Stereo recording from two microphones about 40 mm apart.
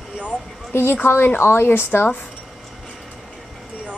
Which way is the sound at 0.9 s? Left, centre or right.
Left.